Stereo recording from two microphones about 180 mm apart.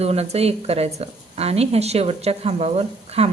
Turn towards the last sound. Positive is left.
turn(degrees=-35)  # may be behind; listen again after turning